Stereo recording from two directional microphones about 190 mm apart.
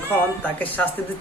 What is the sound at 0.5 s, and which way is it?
Speech, 10° left (ahead or behind).